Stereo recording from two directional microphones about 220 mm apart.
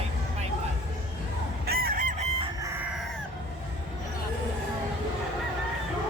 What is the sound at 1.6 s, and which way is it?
Fowl, 45° right (ahead or behind).